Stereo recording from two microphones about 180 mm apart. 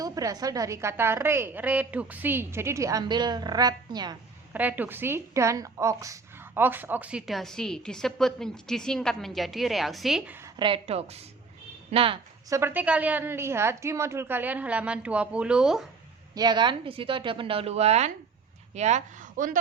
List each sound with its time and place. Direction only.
0.0 s a woman's voice: 20° right (ahead or behind)
4.5 s a woman's voice: 10° right (ahead or behind)
10.6 s a woman's voice: 30° right (ahead or behind)
12.5 s a woman's voice: 15° right (ahead or behind)
16.3 s a woman's voice: 25° right (ahead or behind); by 19.5 s 45° right (ahead or behind)